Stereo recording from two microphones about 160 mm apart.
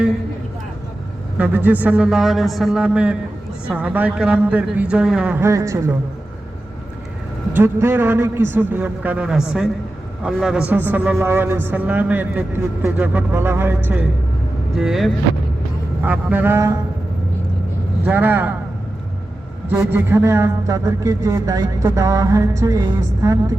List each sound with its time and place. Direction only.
1.4 s a man's voice: 10° right (ahead or behind)
7.5 s a man's voice: 15° right (ahead or behind)
14.8 s a man's voice: 5° right (ahead or behind); by 16.8 s 20° right (ahead or behind)
18.0 s a man's voice: 10° right (ahead or behind)
19.7 s a man's voice: 15° right (ahead or behind)